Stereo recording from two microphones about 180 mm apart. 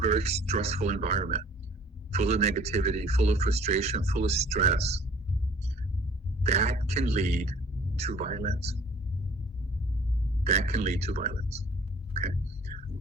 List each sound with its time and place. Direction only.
0.0 s speech: 35° right (ahead or behind)
6.4 s speech: 35° right (ahead or behind)
10.4 s speech: 35° right (ahead or behind)
12.1 s whispering: 35° right (ahead or behind)